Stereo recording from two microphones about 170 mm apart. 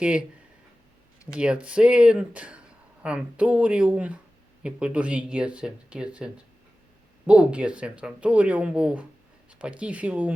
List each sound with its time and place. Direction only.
0.0 s speech: 5° right (ahead or behind)
1.3 s speech: 5° right (ahead or behind)